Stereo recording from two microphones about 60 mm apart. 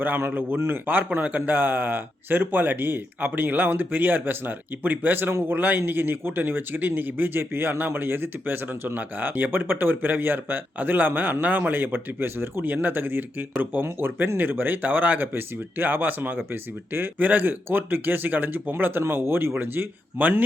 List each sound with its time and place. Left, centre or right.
0.2 s a man's voice: right